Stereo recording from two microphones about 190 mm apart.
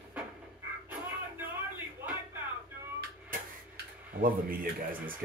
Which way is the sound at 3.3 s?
45° right (ahead or behind).